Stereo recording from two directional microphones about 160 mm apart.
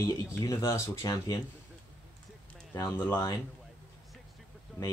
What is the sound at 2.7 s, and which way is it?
Speech, 20° left (ahead or behind).